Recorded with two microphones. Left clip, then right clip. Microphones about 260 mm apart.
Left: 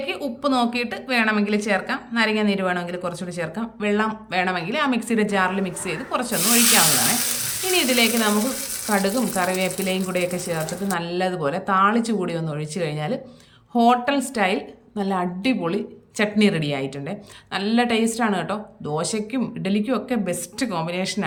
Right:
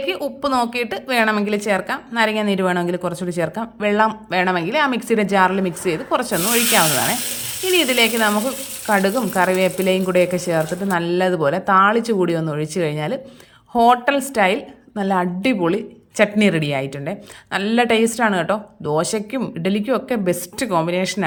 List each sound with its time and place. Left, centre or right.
0.0 s a woman's voice: centre